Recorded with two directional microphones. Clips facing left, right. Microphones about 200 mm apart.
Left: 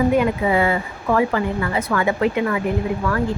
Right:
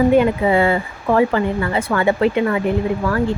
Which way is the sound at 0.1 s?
30° right (ahead or behind).